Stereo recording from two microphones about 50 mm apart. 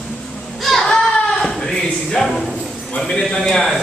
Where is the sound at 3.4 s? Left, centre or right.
Centre.